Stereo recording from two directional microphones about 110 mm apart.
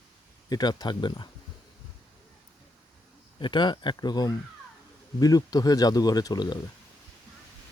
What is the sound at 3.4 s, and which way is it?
Speech, 45° left (ahead or behind).